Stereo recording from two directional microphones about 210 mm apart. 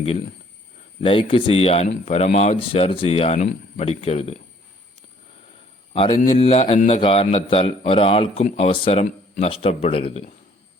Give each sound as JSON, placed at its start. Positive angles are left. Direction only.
{"t": 1.0, "sound": "a man's voice", "side_deg": 25}
{"t": 6.3, "sound": "a man's voice", "side_deg": 25}